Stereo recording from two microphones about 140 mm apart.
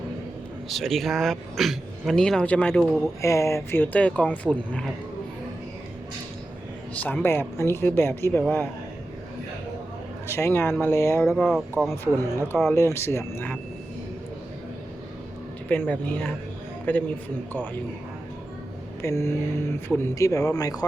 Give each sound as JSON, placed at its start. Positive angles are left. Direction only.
{"t": 0.7, "sound": "speech", "side_deg": 0}
{"t": 3.2, "sound": "speech", "side_deg": 20}
{"t": 7.0, "sound": "speech", "side_deg": 15}
{"t": 10.3, "sound": "speech", "side_deg": 15}
{"t": 11.2, "sound": "speech", "side_deg": 0}
{"t": 11.9, "sound": "speech", "side_deg": 20}
{"t": 15.7, "sound": "speech", "side_deg": 10}
{"t": 19.0, "sound": "speech", "side_deg": 20}